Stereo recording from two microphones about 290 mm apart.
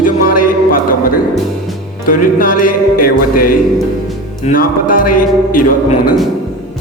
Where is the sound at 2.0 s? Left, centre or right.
Left.